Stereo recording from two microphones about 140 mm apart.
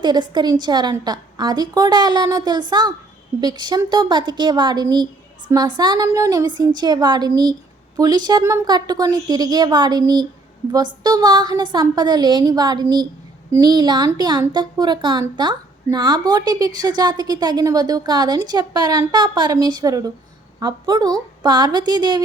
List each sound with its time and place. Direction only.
0.0 s a woman's voice: 30° right (ahead or behind)